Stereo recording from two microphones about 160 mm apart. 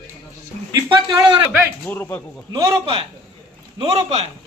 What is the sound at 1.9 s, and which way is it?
Speech, 10° left (ahead or behind).